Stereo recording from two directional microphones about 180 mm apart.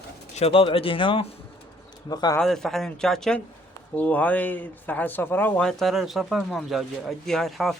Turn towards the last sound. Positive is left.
turn(degrees=0)  # may be behind; listen again after turning